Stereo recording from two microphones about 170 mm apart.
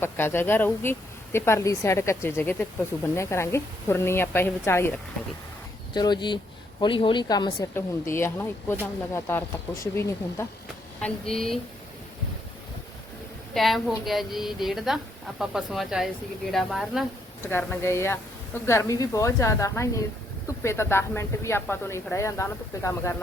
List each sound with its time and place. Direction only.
0.0 s speech: 15° left (ahead or behind)
5.9 s a woman's voice: 25° left (ahead or behind)
11.0 s a woman's voice: 5° left (ahead or behind)
13.5 s a woman's voice: centre (ahead or behind)
17.4 s speech: 10° left (ahead or behind)